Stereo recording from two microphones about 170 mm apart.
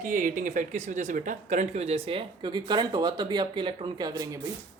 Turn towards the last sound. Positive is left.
turn(degrees=-20)  # may be behind; listen again after turning